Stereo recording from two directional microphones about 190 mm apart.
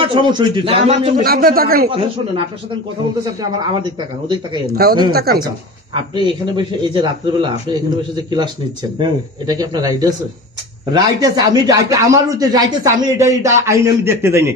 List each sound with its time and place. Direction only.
0.0 s a man's voice: 25° right (ahead or behind)
1.2 s speech: 50° right (ahead or behind)
1.9 s a man's voice: 30° right (ahead or behind)
4.8 s speech: 55° right (ahead or behind)
6.1 s a man's voice: 25° right (ahead or behind)